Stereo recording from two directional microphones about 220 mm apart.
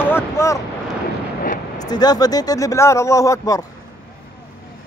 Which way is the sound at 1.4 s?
40° left (ahead or behind).